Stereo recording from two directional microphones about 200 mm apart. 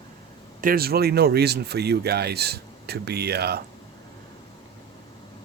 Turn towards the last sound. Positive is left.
turn(degrees=-55)  # may be behind; listen again after turning